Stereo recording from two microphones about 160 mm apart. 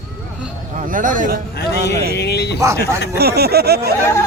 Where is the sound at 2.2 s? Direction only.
90° left.